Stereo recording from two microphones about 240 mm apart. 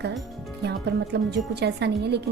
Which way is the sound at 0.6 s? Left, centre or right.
Right.